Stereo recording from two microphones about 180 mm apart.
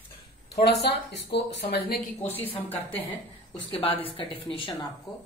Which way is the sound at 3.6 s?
30° left (ahead or behind).